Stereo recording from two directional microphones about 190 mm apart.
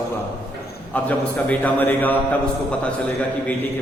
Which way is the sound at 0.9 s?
10° left (ahead or behind).